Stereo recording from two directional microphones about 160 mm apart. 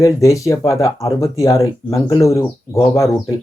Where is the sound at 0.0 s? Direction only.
20° left (ahead or behind).